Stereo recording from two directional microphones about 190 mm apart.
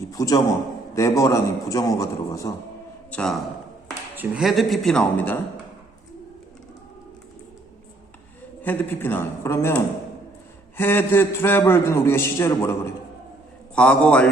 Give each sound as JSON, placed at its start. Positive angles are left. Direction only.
{"t": 0.0, "sound": "a man's voice", "side_deg": 20}
{"t": 3.1, "sound": "speech", "side_deg": 5}
{"t": 8.6, "sound": "a man's voice", "side_deg": 10}